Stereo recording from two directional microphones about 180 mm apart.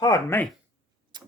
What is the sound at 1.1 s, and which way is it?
Tick-tock, 25° right (ahead or behind).